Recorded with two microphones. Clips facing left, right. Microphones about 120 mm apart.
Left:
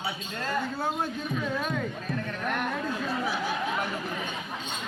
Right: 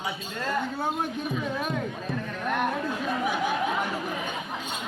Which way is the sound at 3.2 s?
15° right (ahead or behind).